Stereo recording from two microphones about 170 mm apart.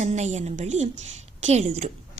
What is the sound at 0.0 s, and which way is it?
Speech, 40° right (ahead or behind).